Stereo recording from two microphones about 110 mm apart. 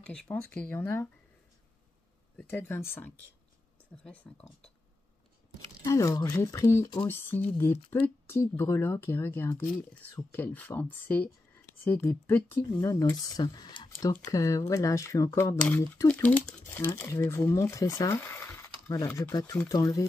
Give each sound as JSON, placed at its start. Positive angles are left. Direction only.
{"t": 0.0, "sound": "speech", "side_deg": 10}
{"t": 2.3, "sound": "speech", "side_deg": 20}
{"t": 3.9, "sound": "speech", "side_deg": 10}
{"t": 5.9, "sound": "speech", "side_deg": 30}
{"t": 12.8, "sound": "speech", "side_deg": 30}
{"t": 16.1, "sound": "speech", "side_deg": 10}
{"t": 16.6, "sound": "speech", "side_deg": 20}